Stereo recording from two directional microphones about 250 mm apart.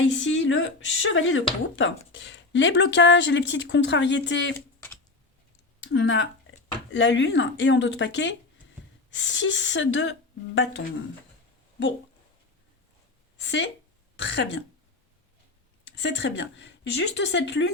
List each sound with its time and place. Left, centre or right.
0.0 s speech: left
5.8 s speech: left
13.4 s speech: left
16.0 s speech: left